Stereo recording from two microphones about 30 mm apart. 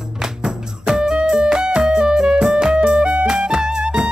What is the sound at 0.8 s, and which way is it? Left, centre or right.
Music, centre.